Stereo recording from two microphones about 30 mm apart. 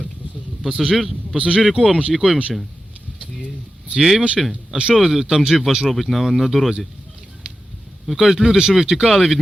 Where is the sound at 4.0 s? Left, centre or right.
Centre.